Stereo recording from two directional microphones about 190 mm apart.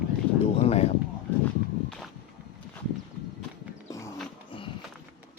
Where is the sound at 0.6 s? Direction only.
35° left (ahead or behind).